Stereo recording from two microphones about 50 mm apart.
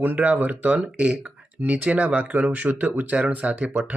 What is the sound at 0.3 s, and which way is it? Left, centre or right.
Speech, right.